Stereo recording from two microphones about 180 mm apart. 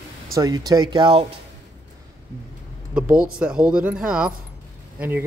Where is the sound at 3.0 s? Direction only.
5° right (ahead or behind).